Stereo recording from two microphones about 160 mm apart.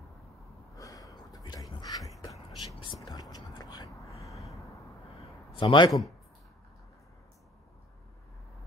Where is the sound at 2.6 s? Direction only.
25° left (ahead or behind).